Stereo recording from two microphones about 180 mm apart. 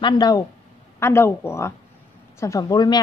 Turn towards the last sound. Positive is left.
turn(degrees=20)  # may be behind; listen again after turning